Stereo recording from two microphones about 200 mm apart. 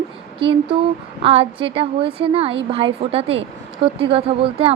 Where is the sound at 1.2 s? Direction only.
30° right (ahead or behind).